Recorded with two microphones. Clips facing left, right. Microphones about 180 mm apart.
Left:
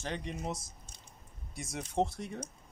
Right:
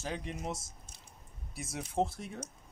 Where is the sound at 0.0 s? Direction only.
Centre (ahead or behind).